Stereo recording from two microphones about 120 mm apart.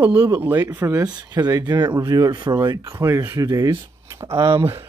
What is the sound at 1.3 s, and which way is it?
Speech, 35° right (ahead or behind).